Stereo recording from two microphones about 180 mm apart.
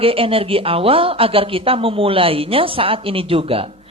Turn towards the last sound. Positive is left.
turn(degrees=-30)  # may be behind; listen again after turning